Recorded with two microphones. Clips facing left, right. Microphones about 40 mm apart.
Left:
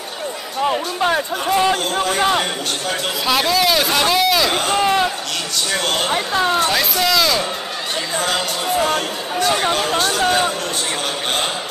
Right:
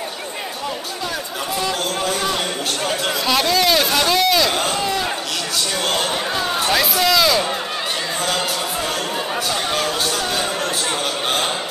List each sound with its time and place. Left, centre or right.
0.7 s speech: left
3.3 s a man's voice: centre
4.7 s chop: left
6.0 s speech: left
6.6 s speech: centre
8.3 s a man's voice: centre